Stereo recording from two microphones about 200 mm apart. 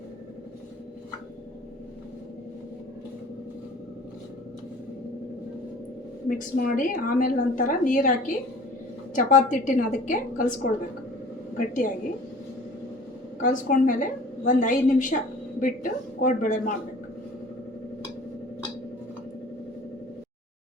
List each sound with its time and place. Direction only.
6.2 s a woman's voice: 45° left (ahead or behind)
9.1 s a woman's voice: 40° left (ahead or behind)
13.4 s a woman's voice: 40° left (ahead or behind)